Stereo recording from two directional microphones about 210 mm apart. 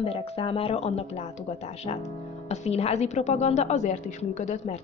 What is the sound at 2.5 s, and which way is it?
A woman's voice, 30° left (ahead or behind).